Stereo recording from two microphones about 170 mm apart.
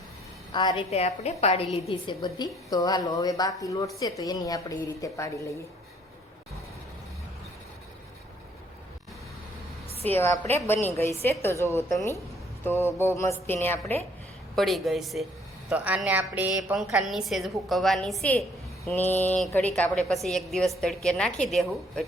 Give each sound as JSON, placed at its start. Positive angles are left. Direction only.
{"t": 0.5, "sound": "a woman's voice", "side_deg": 25}
{"t": 0.9, "sound": "a woman's voice", "side_deg": 40}
{"t": 10.1, "sound": "a woman's voice", "side_deg": 15}
{"t": 14.5, "sound": "a woman's voice", "side_deg": 0}